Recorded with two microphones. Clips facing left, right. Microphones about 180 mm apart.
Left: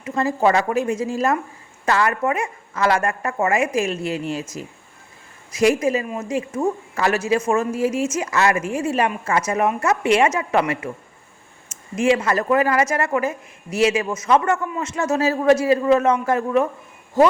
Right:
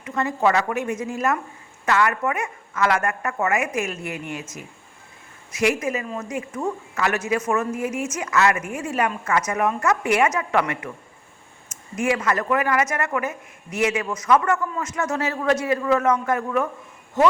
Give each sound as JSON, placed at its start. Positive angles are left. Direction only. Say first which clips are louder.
{"t": 0.0, "sound": "a woman's voice", "louder": "left 3 dB", "side_deg": 30}
{"t": 5.5, "sound": "a woman's voice", "louder": "left 5 dB", "side_deg": 35}
{"t": 11.9, "sound": "a woman's voice", "louder": "left 4 dB", "side_deg": 25}